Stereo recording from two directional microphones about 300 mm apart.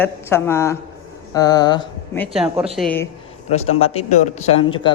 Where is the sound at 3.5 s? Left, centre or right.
Left.